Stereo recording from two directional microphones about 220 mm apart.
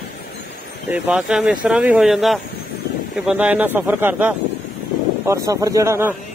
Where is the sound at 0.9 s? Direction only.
5° right (ahead or behind).